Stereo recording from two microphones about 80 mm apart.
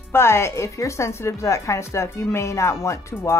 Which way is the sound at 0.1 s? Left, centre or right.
Left.